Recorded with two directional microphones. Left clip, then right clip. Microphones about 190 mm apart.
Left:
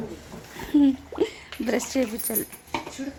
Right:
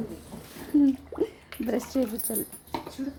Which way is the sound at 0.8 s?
Centre (ahead or behind).